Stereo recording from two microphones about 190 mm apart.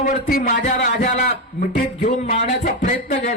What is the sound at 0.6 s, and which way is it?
Music, 35° left (ahead or behind).